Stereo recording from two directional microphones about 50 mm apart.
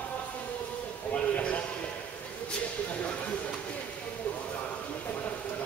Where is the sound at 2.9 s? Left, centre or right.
Left.